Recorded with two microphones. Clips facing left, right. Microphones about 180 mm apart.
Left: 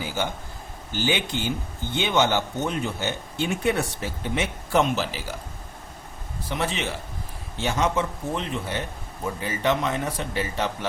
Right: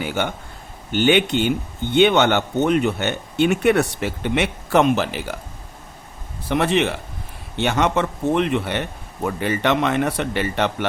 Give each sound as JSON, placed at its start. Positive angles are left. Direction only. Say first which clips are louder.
{"t": 0.0, "sound": "speech", "louder": "right 5 dB", "side_deg": -65}
{"t": 6.5, "sound": "speech", "louder": "right 9 dB", "side_deg": -60}